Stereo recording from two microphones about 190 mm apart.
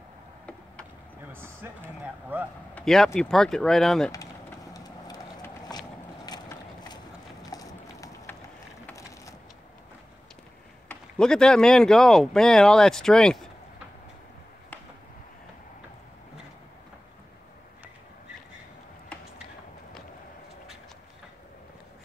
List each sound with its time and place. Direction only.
1.3 s speech: 10° right (ahead or behind)
2.7 s speech: 5° left (ahead or behind)
4.7 s vehicle: 20° left (ahead or behind)
7.4 s a sound: 20° left (ahead or behind)
10.9 s speech: 5° left (ahead or behind)